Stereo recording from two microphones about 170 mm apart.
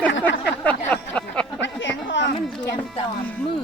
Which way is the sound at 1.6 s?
90° left.